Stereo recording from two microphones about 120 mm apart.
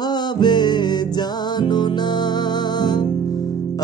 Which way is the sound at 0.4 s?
40° left (ahead or behind).